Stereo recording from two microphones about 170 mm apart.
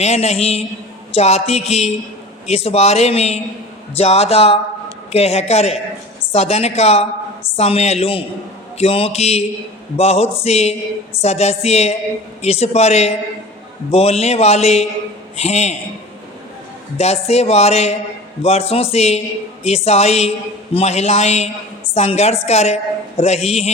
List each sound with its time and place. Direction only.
0.0 s a woman's voice: 40° left (ahead or behind)
17.0 s a woman's voice: 40° left (ahead or behind)